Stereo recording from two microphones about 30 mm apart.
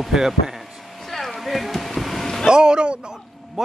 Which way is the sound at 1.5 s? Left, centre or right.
Centre.